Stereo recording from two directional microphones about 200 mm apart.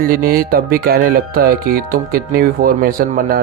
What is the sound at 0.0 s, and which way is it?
Speech, 45° right (ahead or behind).